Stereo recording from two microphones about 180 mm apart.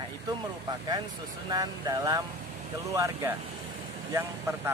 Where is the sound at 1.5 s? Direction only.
20° right (ahead or behind).